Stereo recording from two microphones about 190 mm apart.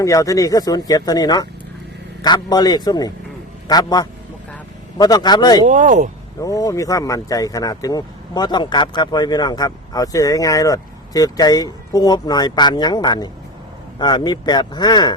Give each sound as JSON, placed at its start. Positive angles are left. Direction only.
{"t": 0.0, "sound": "speech", "side_deg": 15}
{"t": 5.6, "sound": "speech", "side_deg": -40}
{"t": 6.4, "sound": "speech", "side_deg": 20}